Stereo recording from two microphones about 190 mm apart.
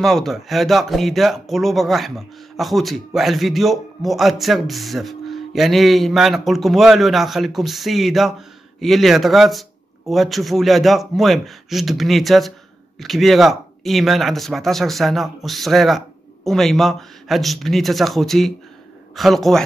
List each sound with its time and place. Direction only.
0.0 s speech: centre (ahead or behind)